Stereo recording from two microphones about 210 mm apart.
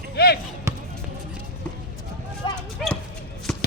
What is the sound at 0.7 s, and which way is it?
Basketball bounce, 15° right (ahead or behind).